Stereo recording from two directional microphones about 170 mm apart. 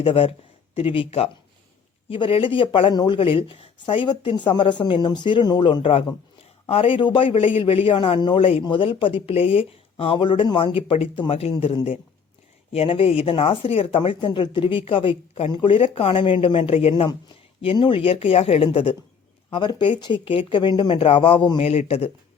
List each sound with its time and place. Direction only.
0.0 s a man's voice: 30° left (ahead or behind)
21.7 s a man's voice: 40° left (ahead or behind)